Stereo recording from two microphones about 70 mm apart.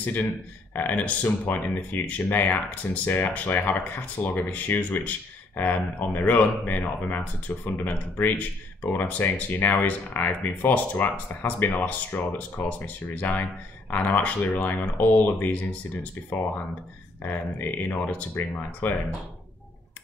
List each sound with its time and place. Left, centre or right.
0.0 s speech: left
17.2 s speech: left